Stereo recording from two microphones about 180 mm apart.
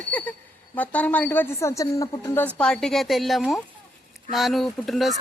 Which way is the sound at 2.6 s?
5° left (ahead or behind).